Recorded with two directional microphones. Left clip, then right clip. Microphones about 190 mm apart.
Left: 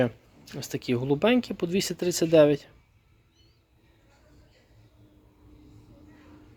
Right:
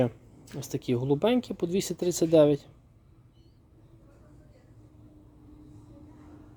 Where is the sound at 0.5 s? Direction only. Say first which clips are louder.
Left 1 dB; 10° right (ahead or behind).